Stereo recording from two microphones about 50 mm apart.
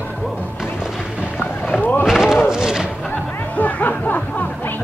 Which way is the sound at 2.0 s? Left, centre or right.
Centre.